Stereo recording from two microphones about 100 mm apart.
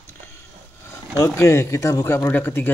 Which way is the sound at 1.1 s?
30° left (ahead or behind).